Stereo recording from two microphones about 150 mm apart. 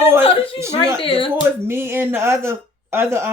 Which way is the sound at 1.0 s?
35° left (ahead or behind).